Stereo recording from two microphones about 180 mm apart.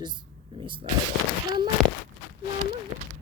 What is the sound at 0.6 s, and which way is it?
Speech, 30° right (ahead or behind).